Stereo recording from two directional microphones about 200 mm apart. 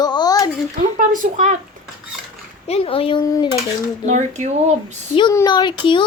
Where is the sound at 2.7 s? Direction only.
30° left (ahead or behind).